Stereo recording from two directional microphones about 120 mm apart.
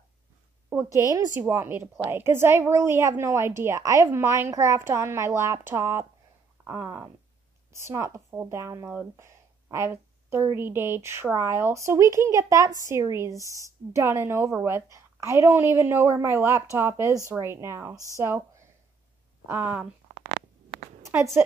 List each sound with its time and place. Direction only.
0.9 s a woman's voice: 25° right (ahead or behind)
21.1 s speech: 15° right (ahead or behind)